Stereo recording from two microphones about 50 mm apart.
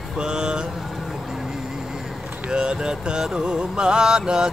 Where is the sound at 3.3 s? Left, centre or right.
Centre.